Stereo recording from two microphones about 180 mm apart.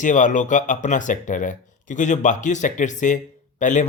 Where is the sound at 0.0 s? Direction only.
45° left (ahead or behind).